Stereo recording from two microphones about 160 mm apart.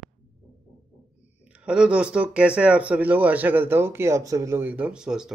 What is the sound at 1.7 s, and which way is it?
Speech, 5° right (ahead or behind).